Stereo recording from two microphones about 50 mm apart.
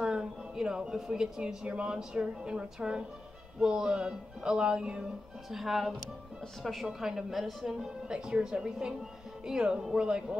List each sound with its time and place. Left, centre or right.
0.0 s a woman's voice: centre
1.7 s music: centre
5.5 s a woman's voice: centre
8.1 s music: centre